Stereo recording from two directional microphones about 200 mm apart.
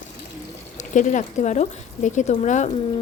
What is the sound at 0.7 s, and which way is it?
A woman's voice, 40° left (ahead or behind).